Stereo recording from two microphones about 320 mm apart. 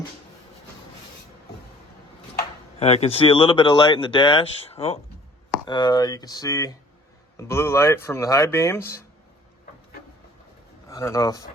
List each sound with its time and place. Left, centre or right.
2.7 s speech: centre
10.8 s speech: centre